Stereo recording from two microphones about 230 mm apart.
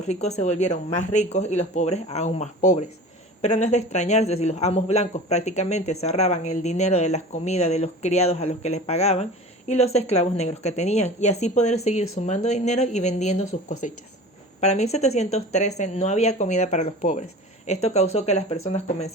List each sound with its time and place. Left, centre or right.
0.1 s speech: left